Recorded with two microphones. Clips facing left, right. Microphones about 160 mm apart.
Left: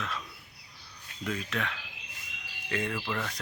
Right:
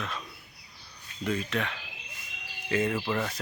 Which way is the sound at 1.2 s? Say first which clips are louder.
Right 4 dB; centre (ahead or behind).